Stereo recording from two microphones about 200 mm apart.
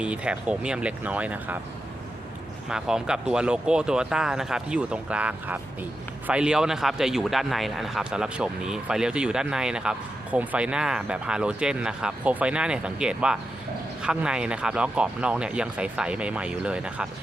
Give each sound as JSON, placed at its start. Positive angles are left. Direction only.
{"t": 0.0, "sound": "speech", "side_deg": -5}
{"t": 2.6, "sound": "speech", "side_deg": -5}